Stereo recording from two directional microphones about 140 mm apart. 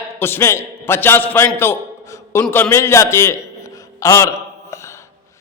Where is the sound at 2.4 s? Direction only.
15° left (ahead or behind).